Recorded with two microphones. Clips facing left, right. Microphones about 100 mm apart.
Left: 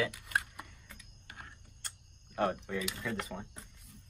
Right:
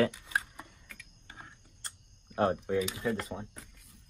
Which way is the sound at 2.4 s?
35° right (ahead or behind).